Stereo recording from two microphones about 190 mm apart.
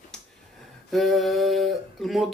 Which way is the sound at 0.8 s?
Centre (ahead or behind).